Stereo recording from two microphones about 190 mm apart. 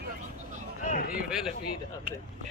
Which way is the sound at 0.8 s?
45° left (ahead or behind).